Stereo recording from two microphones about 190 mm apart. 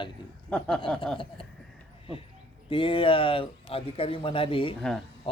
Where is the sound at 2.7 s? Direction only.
25° left (ahead or behind).